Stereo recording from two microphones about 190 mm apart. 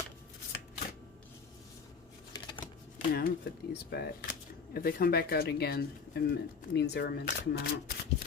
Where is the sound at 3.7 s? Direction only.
60° left (ahead or behind).